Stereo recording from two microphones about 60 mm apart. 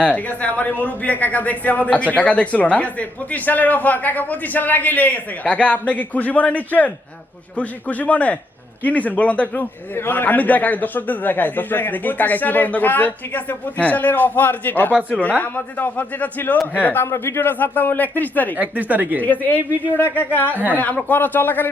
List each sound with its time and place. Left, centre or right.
0.0 s a man's voice: left
9.9 s a man's voice: left
17.1 s a man's voice: left
17.4 s a man's voice: left
18.5 s speech: right
19.2 s a man's voice: left